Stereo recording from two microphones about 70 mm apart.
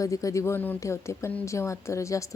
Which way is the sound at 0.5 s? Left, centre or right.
Left.